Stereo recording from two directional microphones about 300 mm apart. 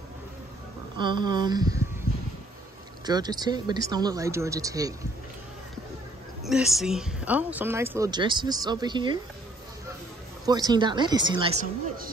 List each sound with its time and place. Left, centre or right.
0.9 s a woman's voice: centre
3.1 s a woman's voice: centre
6.4 s a woman's voice: centre
10.4 s a woman's voice: centre